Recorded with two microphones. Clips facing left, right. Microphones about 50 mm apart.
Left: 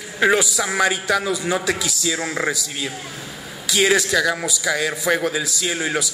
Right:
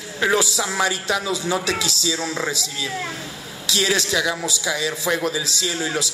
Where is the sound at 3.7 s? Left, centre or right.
Left.